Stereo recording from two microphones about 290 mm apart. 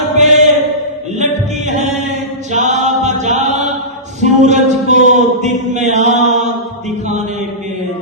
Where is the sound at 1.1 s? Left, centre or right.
Right.